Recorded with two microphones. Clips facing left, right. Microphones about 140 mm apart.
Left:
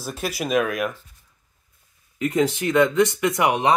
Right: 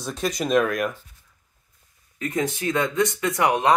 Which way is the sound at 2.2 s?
25° left (ahead or behind).